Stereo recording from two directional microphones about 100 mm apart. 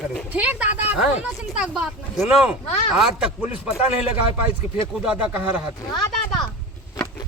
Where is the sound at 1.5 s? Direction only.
5° right (ahead or behind).